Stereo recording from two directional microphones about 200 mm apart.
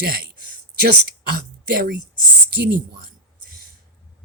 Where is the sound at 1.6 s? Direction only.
50° right (ahead or behind).